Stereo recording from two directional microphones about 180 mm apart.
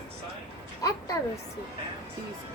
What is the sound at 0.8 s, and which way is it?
Speech, 20° left (ahead or behind).